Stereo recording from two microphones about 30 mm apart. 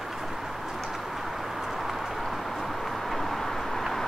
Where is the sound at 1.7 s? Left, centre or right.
Centre.